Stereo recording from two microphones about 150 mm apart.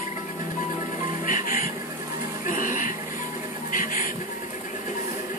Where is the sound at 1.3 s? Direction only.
65° left (ahead or behind).